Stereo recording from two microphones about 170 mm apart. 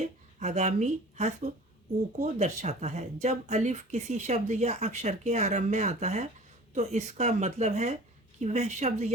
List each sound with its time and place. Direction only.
0.3 s speech: 45° right (ahead or behind)